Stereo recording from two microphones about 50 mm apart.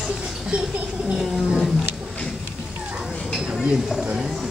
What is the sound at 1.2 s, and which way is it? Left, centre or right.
Roaring cats, centre.